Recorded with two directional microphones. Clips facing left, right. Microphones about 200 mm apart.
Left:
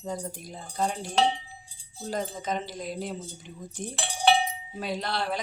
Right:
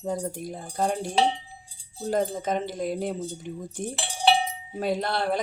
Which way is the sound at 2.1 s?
55° right (ahead or behind).